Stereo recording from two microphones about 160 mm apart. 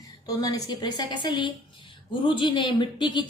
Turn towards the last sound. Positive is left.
turn(degrees=30)  # may be behind; listen again after turning